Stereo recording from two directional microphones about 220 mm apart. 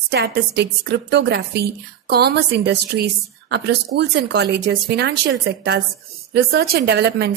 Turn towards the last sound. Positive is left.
turn(degrees=-50)  # may be behind; listen again after turning